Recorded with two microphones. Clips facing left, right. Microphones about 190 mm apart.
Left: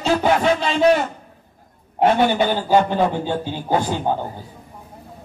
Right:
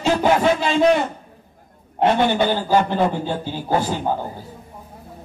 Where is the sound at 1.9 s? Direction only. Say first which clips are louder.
Left 1 dB; 10° left (ahead or behind).